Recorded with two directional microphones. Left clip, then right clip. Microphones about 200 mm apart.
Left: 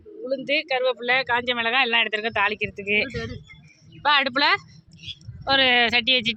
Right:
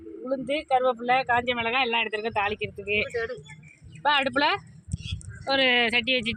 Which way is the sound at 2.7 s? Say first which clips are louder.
Left 4 dB; 15° left (ahead or behind).